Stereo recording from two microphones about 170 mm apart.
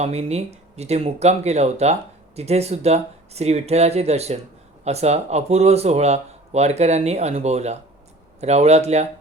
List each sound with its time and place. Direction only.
0.0 s speech: 40° right (ahead or behind)